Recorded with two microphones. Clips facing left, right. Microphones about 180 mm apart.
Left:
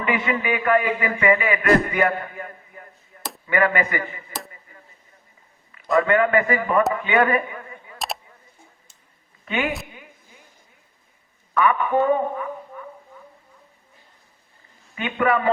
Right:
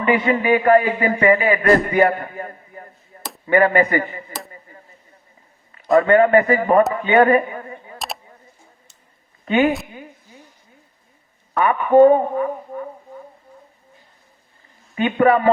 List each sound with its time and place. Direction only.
0.0 s a man's voice: 40° right (ahead or behind)
6.1 s a man's voice: 35° right (ahead or behind)
7.9 s a sound: centre (ahead or behind)
9.5 s a man's voice: 35° right (ahead or behind)
11.5 s a woman's voice: 35° right (ahead or behind)
14.9 s a man's voice: 35° right (ahead or behind)